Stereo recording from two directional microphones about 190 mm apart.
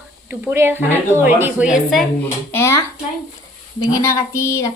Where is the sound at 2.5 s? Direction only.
15° left (ahead or behind).